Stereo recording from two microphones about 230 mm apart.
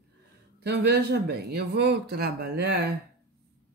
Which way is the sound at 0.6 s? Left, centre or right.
Right.